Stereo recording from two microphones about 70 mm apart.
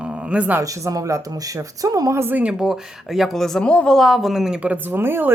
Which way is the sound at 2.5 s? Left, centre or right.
Centre.